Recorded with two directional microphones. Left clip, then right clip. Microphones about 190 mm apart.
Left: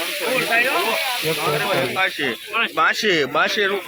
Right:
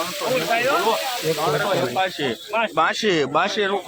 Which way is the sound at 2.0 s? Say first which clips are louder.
Left 2 dB; 50° right (ahead or behind).